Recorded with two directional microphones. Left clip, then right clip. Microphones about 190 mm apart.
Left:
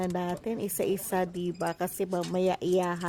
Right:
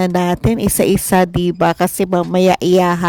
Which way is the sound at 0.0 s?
45° right (ahead or behind).